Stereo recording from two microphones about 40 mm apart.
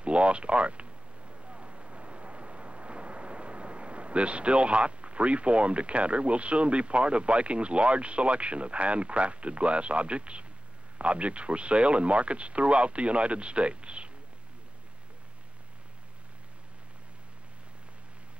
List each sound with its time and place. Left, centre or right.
0.0 s speech: right